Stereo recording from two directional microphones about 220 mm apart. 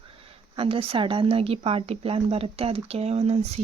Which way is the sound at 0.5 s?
25° right (ahead or behind).